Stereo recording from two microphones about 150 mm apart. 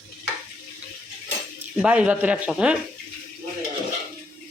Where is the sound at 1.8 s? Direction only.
5° right (ahead or behind).